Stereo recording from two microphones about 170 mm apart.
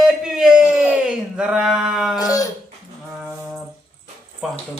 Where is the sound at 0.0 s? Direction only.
5° right (ahead or behind).